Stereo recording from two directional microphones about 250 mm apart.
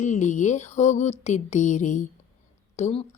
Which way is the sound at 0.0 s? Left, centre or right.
Left.